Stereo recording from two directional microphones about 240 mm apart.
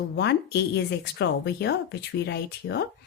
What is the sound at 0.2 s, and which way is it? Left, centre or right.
Speech, left.